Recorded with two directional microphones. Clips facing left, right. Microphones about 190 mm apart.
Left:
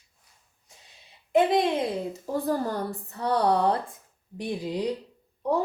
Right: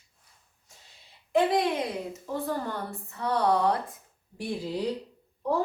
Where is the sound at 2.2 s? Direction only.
35° left (ahead or behind).